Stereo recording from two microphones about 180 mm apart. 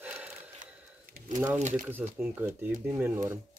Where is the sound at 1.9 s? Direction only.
10° right (ahead or behind).